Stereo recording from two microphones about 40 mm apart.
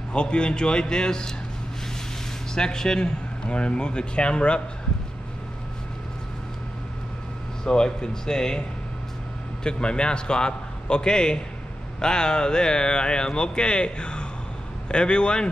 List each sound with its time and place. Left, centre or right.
0.1 s speech: left
2.5 s speech: centre
7.6 s speech: centre